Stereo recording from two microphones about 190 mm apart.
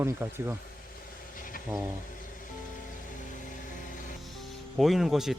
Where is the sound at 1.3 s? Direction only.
45° left (ahead or behind).